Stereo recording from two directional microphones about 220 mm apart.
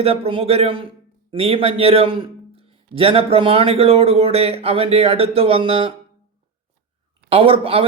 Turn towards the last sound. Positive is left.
turn(degrees=-25)  # may be behind; listen again after turning